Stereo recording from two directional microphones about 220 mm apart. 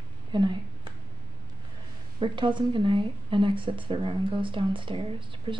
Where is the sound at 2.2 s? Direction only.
20° right (ahead or behind).